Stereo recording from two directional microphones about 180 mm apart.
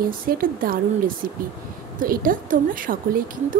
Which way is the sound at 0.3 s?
55° right (ahead or behind).